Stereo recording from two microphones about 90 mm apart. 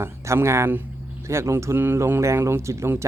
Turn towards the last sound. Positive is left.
turn(degrees=-30)  # may be behind; listen again after turning